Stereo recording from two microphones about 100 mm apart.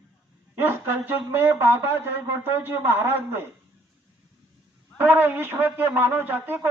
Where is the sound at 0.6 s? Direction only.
20° right (ahead or behind).